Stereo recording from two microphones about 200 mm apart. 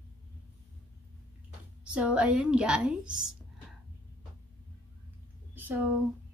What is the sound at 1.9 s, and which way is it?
A woman's voice, 5° right (ahead or behind).